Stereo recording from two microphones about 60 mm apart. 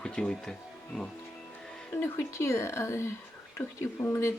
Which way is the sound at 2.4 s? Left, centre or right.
Left.